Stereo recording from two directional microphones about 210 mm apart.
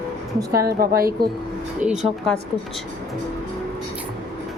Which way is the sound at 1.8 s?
5° right (ahead or behind).